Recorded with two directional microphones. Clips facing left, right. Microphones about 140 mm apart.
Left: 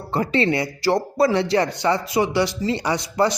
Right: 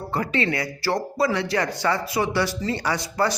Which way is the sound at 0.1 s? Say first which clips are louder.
Left 5 dB; 30° left (ahead or behind).